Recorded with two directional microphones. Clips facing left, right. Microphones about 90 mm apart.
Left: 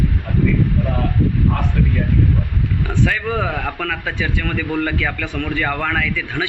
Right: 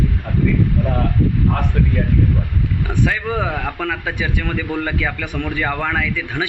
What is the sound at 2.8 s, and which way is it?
A man's voice, 10° right (ahead or behind).